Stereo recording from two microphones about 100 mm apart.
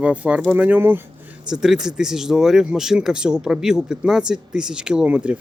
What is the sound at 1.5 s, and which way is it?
Speech, 5° right (ahead or behind).